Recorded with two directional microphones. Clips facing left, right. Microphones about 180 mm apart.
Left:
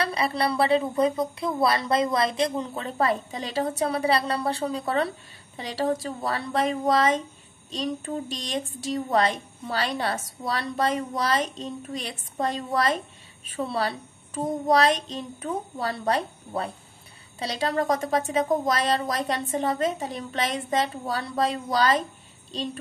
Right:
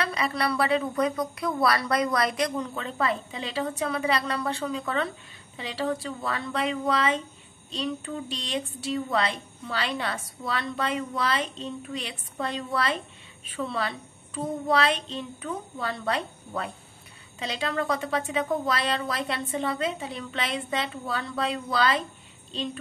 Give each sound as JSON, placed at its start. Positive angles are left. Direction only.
{"t": 0.0, "sound": "a woman's voice", "side_deg": 30}